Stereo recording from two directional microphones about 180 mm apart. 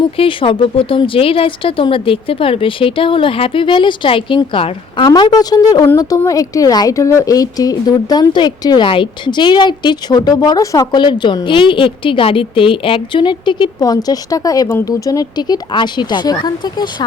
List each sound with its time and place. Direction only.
0.2 s speech: 30° left (ahead or behind)